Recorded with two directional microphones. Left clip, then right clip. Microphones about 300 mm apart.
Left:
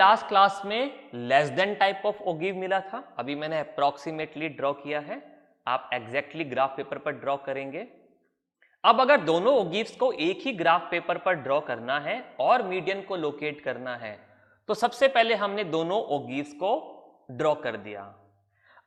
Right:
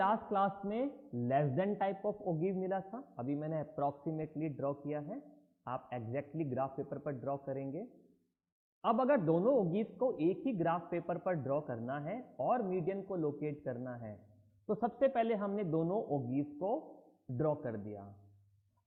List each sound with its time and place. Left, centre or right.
0.0 s a man's voice: centre
16.0 s a man's voice: left
17.3 s a man's voice: centre